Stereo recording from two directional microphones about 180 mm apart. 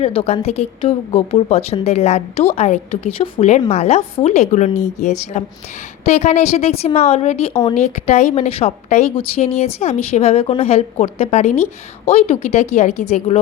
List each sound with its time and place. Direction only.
0.0 s a woman's voice: 30° left (ahead or behind)